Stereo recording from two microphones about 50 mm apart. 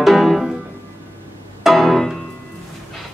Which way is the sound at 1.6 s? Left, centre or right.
Centre.